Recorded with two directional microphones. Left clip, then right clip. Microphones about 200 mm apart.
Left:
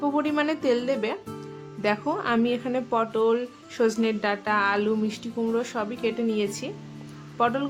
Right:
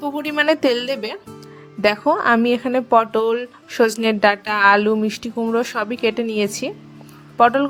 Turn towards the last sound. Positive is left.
turn(degrees=-35)  # may be behind; listen again after turning